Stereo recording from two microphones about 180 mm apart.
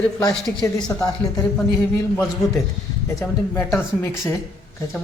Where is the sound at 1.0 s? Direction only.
20° left (ahead or behind).